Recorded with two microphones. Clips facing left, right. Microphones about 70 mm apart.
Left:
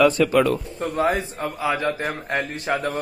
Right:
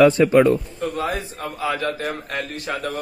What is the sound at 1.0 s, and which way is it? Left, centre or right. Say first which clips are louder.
Speech: left 8 dB; left.